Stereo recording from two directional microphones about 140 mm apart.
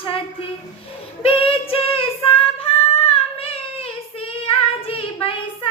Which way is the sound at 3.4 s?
45° left (ahead or behind).